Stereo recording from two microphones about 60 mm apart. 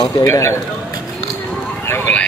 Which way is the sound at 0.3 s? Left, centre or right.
Left.